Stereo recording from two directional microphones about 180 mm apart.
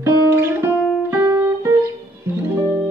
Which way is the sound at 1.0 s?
15° right (ahead or behind).